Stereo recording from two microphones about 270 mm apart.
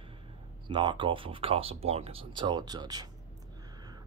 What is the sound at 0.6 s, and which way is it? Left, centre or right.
Speech, centre.